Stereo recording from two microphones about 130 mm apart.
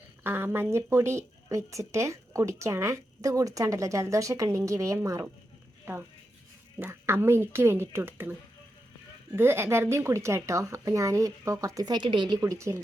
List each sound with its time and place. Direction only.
0.2 s speech: 15° right (ahead or behind)